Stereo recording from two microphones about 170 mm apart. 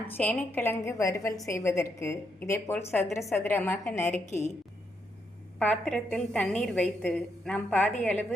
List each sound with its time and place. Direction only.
0.1 s a woman's voice: 10° left (ahead or behind)
4.0 s a woman's voice: 45° left (ahead or behind)
5.5 s a woman's voice: 5° left (ahead or behind)